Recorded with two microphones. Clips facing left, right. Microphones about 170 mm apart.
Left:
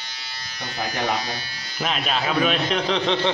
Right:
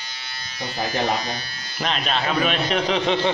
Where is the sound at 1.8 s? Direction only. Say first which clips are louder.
Even; 5° left (ahead or behind).